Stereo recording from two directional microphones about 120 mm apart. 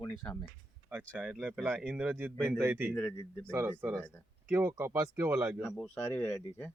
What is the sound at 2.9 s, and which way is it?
Speech, 20° left (ahead or behind).